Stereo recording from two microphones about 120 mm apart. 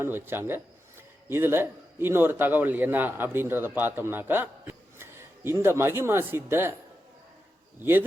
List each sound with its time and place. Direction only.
0.0 s a man's voice: 20° right (ahead or behind)
7.8 s speech: 15° right (ahead or behind)